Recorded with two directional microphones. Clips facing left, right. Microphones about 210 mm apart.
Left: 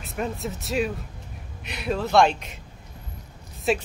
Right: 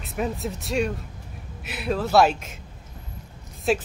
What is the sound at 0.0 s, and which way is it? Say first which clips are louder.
A woman's voice: right 2 dB; centre (ahead or behind).